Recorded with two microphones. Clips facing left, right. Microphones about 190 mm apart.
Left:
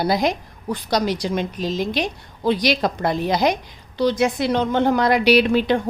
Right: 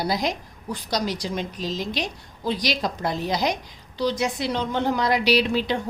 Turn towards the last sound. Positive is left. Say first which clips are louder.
# left 5 dB
turn(degrees=55)  # may be behind; listen again after turning